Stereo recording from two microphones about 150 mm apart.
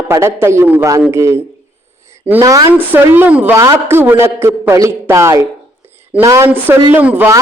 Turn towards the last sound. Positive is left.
turn(degrees=-15)  # may be behind; listen again after turning